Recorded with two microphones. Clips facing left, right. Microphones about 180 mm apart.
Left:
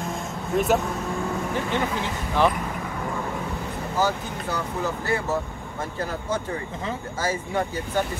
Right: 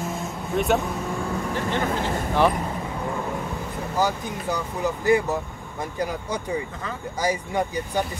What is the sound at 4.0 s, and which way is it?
Speech, 15° right (ahead or behind).